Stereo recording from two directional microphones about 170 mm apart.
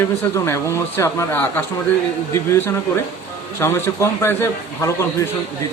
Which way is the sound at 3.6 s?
15° left (ahead or behind).